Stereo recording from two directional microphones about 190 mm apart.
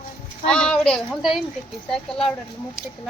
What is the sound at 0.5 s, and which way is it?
A child's voice, 5° left (ahead or behind).